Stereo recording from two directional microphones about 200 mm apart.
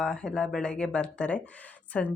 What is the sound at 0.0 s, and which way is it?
Speech, 5° left (ahead or behind).